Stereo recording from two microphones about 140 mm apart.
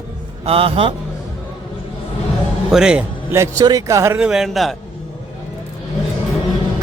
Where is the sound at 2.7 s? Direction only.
5° right (ahead or behind).